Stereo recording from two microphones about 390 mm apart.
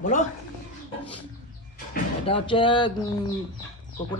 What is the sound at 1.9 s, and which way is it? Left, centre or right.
Speech, centre.